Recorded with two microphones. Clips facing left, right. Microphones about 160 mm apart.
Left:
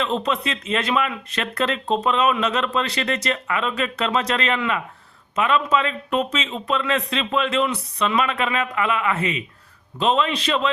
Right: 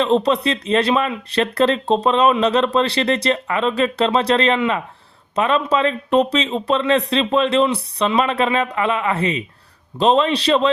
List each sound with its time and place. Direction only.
0.0 s speech: 35° right (ahead or behind)